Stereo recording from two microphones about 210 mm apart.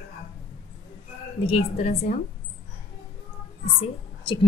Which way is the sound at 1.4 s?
30° left (ahead or behind).